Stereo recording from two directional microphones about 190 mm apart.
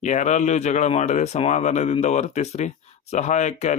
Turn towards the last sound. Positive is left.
turn(degrees=40)  # may be behind; listen again after turning